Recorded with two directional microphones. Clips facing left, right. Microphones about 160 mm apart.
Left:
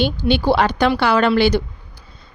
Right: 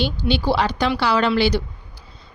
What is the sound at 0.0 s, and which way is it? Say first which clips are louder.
A woman's voice: left 4 dB; 55° left (ahead or behind).